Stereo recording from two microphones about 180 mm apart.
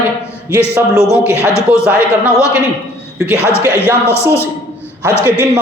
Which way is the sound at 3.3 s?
15° left (ahead or behind).